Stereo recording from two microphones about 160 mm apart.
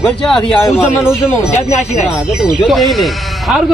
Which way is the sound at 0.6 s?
15° left (ahead or behind).